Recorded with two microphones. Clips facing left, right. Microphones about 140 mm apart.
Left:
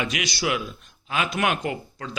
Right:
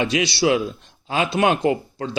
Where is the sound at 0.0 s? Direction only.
30° right (ahead or behind).